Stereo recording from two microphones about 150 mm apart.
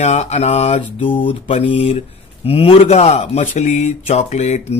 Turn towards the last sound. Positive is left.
turn(degrees=45)  # may be behind; listen again after turning